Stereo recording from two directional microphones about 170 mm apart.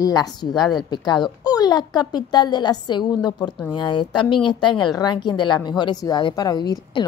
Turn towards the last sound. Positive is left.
turn(degrees=25)  # may be behind; listen again after turning